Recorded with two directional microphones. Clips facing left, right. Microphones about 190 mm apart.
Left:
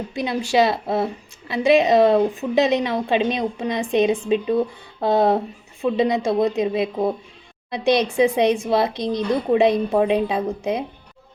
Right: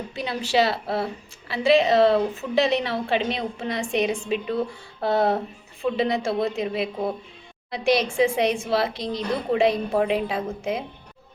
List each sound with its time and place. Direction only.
0.1 s speech: 15° left (ahead or behind)
4.9 s a sound: 20° left (ahead or behind)
5.8 s speech: 20° left (ahead or behind)